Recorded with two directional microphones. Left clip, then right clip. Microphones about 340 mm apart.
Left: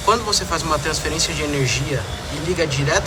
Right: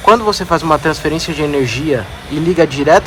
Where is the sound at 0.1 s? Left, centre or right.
Centre.